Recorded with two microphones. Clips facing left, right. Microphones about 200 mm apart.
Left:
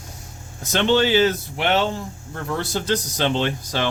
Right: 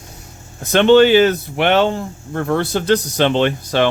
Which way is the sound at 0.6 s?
60° right (ahead or behind).